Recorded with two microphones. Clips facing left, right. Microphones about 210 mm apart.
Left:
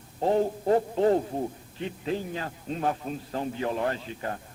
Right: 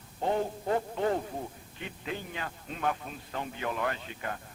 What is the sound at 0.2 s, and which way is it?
A man's voice, 35° left (ahead or behind).